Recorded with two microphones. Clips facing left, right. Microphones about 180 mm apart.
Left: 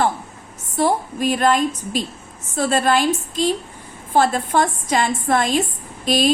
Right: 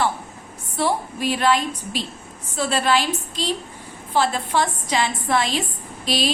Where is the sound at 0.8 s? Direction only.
45° left (ahead or behind).